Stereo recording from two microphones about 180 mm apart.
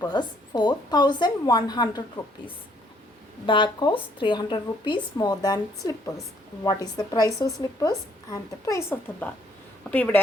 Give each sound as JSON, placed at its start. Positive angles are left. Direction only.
{"t": 0.0, "sound": "speech", "side_deg": 25}
{"t": 3.4, "sound": "speech", "side_deg": 25}